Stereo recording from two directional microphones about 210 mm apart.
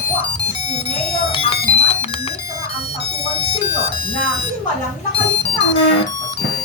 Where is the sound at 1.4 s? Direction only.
25° left (ahead or behind).